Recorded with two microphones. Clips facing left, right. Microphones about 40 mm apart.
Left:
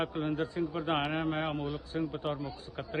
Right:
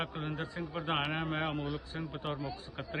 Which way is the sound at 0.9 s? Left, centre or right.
Centre.